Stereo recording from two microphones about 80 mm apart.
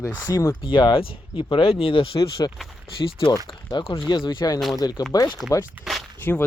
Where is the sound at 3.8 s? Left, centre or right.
Left.